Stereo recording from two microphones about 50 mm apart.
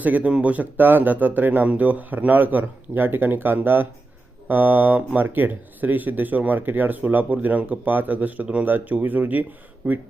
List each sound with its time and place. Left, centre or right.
0.0 s speech: right